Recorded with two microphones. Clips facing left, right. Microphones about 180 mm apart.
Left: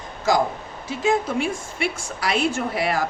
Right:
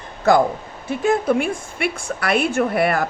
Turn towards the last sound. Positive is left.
turn(degrees=-55)  # may be behind; listen again after turning